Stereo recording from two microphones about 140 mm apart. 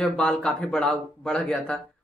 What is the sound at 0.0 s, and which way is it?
Speech, 5° left (ahead or behind).